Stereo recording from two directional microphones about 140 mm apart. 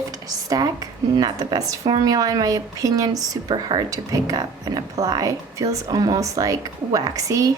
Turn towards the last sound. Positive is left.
turn(degrees=-25)  # may be behind; listen again after turning